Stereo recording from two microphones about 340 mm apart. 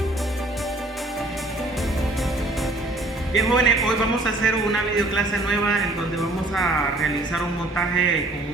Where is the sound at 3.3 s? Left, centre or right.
Centre.